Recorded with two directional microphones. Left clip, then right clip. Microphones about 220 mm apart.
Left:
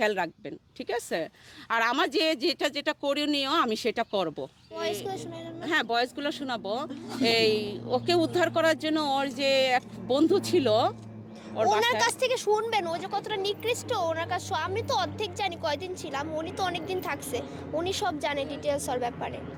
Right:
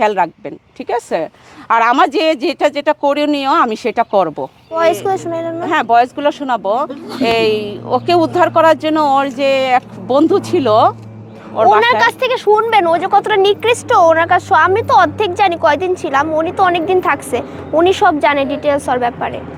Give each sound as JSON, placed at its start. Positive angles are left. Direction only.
{"t": 0.0, "sound": "speech", "side_deg": 5}
{"t": 1.6, "sound": "speech", "side_deg": -10}
{"t": 4.7, "sound": "a woman's voice", "side_deg": -40}
{"t": 5.6, "sound": "a woman's voice", "side_deg": 5}
{"t": 17.3, "sound": "speech", "side_deg": -30}
{"t": 18.9, "sound": "a woman's voice", "side_deg": -10}